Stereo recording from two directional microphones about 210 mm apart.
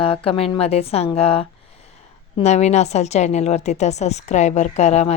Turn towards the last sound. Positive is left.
turn(degrees=30)  # may be behind; listen again after turning